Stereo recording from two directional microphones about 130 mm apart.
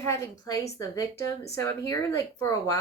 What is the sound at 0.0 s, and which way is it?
Speech, 20° left (ahead or behind).